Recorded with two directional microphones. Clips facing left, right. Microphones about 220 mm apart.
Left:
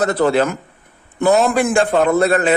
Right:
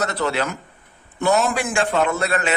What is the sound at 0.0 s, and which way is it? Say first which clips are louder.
Speech: left 7 dB; 50° left (ahead or behind).